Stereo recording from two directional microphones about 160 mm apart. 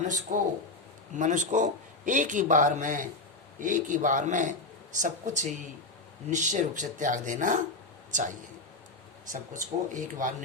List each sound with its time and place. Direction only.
0.3 s a man's voice: 55° right (ahead or behind)
9.3 s a man's voice: 55° right (ahead or behind)